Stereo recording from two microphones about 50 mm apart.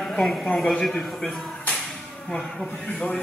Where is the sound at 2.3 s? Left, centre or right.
Centre.